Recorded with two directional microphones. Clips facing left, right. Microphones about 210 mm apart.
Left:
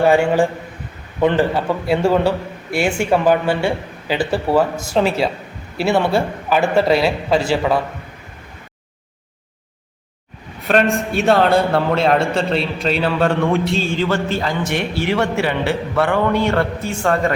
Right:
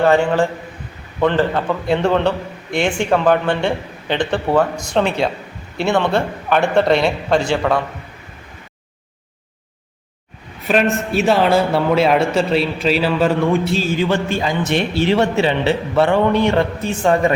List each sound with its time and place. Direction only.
0.0 s a man's voice: 10° left (ahead or behind)
10.7 s a man's voice: 5° right (ahead or behind)
14.0 s a man's voice: 15° right (ahead or behind)